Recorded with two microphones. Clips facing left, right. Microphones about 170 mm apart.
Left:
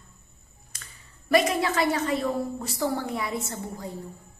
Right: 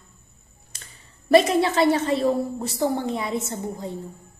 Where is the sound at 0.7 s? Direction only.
30° right (ahead or behind).